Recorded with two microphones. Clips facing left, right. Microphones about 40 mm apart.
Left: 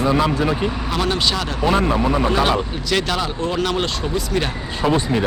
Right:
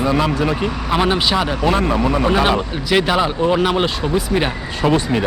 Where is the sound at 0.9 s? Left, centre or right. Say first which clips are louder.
Right 6 dB; right.